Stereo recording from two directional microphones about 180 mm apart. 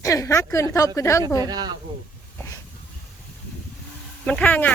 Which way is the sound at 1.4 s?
20° right (ahead or behind).